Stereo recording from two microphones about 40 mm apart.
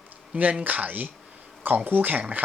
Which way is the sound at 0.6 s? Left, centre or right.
Right.